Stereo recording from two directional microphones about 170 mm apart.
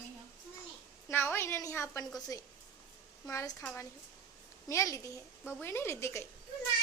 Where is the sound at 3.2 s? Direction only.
15° left (ahead or behind).